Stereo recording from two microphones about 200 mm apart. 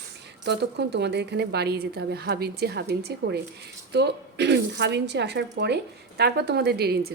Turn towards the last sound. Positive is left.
turn(degrees=-55)  # may be behind; listen again after turning